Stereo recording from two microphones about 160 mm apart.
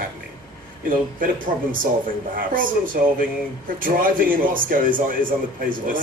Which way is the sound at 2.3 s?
60° right (ahead or behind).